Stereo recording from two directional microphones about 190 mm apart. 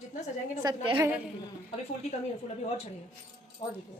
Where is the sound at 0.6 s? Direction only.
25° right (ahead or behind).